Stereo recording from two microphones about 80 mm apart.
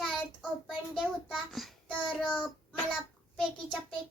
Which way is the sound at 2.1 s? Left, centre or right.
Centre.